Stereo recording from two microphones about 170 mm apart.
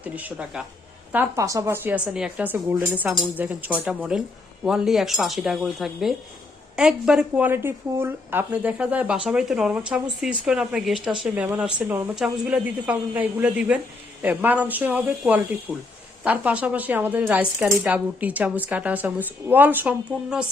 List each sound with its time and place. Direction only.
0.0 s a woman's voice: 10° right (ahead or behind)